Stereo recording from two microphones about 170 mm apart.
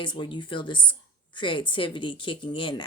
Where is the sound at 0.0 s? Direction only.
30° left (ahead or behind).